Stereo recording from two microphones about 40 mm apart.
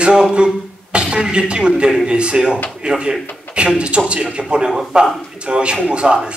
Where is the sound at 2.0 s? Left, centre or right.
Right.